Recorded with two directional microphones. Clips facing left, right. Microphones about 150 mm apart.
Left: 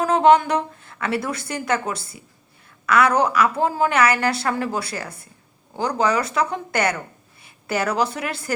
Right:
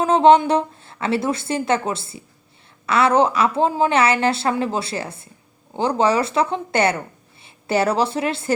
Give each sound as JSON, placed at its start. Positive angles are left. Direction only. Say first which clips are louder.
{"t": 0.0, "sound": "a woman's voice", "louder": "right 2 dB", "side_deg": -25}